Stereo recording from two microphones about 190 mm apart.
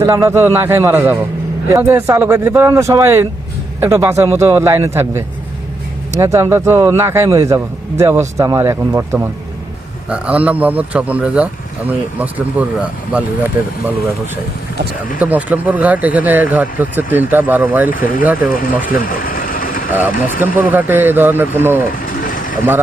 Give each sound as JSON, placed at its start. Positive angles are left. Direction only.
{"t": 0.0, "sound": "a man's voice", "side_deg": -15}
{"t": 15.2, "sound": "a man's voice", "side_deg": -10}
{"t": 17.9, "sound": "speech", "side_deg": 50}
{"t": 18.9, "sound": "vehicle", "side_deg": 50}
{"t": 19.9, "sound": "a man's voice", "side_deg": -10}
{"t": 22.2, "sound": "vehicle", "side_deg": 45}